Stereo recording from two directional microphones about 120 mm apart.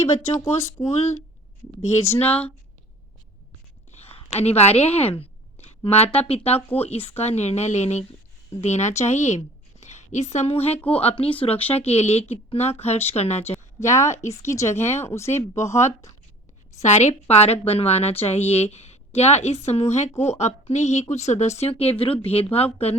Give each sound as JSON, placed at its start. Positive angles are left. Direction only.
{"t": 0.0, "sound": "speech", "side_deg": 20}
{"t": 1.9, "sound": "speech", "side_deg": 25}
{"t": 3.9, "sound": "a woman's voice", "side_deg": 55}
{"t": 13.7, "sound": "speech", "side_deg": 25}
{"t": 16.7, "sound": "a woman's voice", "side_deg": 70}